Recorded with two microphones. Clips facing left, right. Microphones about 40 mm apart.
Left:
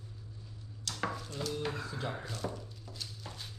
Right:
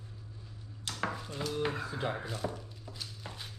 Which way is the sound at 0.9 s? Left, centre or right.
Centre.